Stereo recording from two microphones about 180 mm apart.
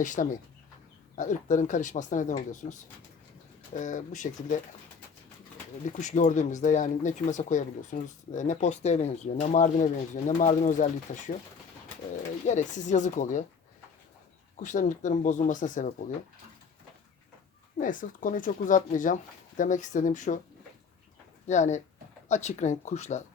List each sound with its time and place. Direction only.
0.0 s speech: 45° left (ahead or behind)
3.8 s speech: 45° left (ahead or behind)
6.0 s speech: 45° left (ahead or behind)
12.5 s speech: 40° left (ahead or behind)
14.5 s speech: 45° left (ahead or behind)
17.7 s speech: 50° left (ahead or behind)
21.4 s speech: 40° left (ahead or behind)